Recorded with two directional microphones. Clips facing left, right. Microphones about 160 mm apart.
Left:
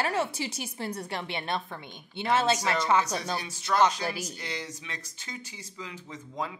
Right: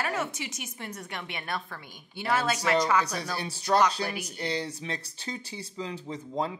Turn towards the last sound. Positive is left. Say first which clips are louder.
# right 4 dB
turn(degrees=-30)  # may be behind; listen again after turning